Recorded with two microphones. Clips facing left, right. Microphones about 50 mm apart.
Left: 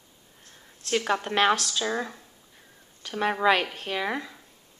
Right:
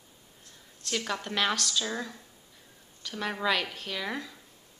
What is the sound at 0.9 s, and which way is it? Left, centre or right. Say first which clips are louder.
A woman's voice: left 7 dB; left.